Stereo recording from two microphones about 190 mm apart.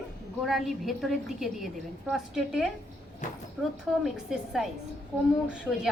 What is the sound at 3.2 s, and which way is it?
Speech, 40° left (ahead or behind).